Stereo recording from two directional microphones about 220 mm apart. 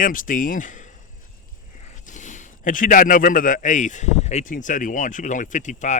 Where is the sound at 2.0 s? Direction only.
35° left (ahead or behind).